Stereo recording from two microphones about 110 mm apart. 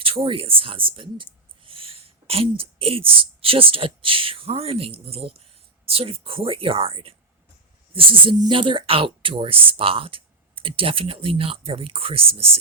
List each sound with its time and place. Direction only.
0.0 s speech: 55° right (ahead or behind)